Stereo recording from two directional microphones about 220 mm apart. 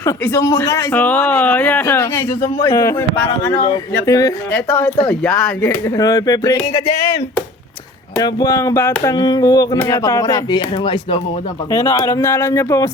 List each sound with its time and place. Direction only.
0.0 s speech: 10° left (ahead or behind)
6.0 s speech: 15° left (ahead or behind)
8.2 s speech: 15° left (ahead or behind)